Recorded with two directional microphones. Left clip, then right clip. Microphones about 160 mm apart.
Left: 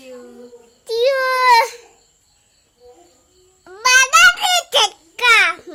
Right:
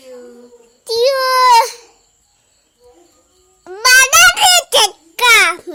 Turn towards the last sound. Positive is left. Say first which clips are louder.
# right 3 dB
turn(degrees=-25)  # may be behind; listen again after turning